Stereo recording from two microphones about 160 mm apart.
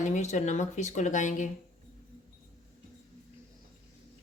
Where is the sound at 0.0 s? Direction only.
50° left (ahead or behind).